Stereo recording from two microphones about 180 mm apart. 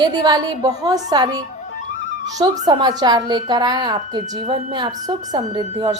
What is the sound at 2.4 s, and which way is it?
A woman's voice, 25° right (ahead or behind).